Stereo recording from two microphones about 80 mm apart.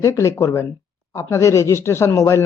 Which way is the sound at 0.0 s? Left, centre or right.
Left.